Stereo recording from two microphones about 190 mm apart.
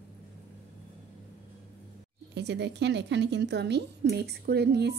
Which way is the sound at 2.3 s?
60° right (ahead or behind).